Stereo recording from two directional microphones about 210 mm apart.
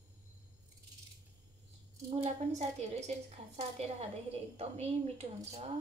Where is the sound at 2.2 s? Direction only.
30° right (ahead or behind).